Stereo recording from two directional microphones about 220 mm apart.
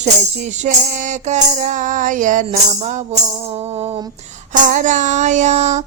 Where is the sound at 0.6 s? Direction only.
30° right (ahead or behind).